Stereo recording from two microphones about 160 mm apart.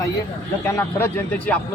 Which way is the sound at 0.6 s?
15° left (ahead or behind).